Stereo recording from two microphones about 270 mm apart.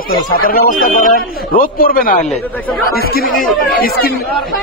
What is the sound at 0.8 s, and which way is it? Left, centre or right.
A man's voice, left.